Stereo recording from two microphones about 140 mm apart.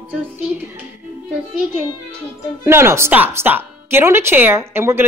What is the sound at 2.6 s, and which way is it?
A woman's voice, 20° right (ahead or behind).